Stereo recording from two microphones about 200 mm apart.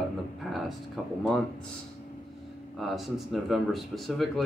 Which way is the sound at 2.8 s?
Centre (ahead or behind).